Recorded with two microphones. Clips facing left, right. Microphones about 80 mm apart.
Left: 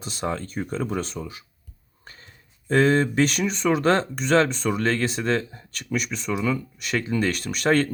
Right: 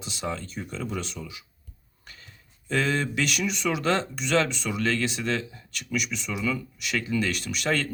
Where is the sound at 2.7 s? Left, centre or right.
Left.